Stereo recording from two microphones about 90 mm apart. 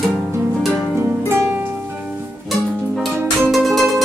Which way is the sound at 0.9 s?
30° right (ahead or behind).